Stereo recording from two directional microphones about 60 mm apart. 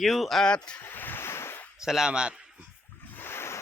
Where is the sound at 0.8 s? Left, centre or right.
Left.